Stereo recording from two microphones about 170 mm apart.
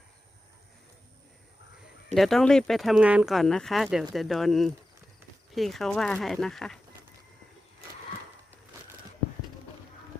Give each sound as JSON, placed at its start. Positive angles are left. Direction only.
{"t": 2.1, "sound": "speech", "side_deg": 0}